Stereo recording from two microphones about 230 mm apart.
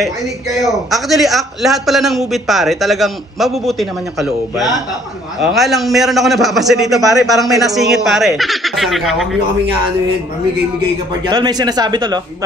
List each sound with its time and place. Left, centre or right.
0.8 s a man's voice: centre
11.2 s speech: centre